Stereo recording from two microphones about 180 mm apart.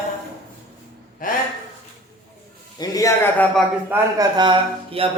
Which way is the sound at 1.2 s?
50° left (ahead or behind).